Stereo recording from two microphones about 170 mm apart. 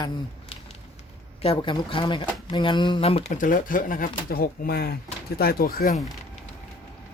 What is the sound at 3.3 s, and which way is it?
Speech, 50° left (ahead or behind).